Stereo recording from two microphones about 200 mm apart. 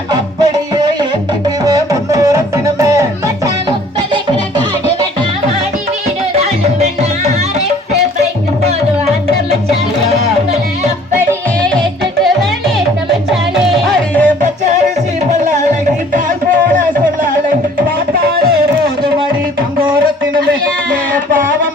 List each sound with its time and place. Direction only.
0.1 s music: 20° right (ahead or behind)
6.3 s music: 30° right (ahead or behind)
13.8 s music: 5° left (ahead or behind)